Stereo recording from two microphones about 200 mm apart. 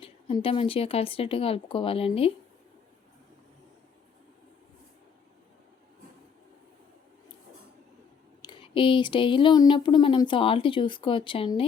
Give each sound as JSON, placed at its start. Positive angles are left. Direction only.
{"t": 0.0, "sound": "speech", "side_deg": 25}
{"t": 8.4, "sound": "speech", "side_deg": 25}